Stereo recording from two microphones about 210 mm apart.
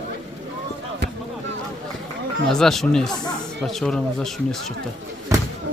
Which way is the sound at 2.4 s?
Centre (ahead or behind).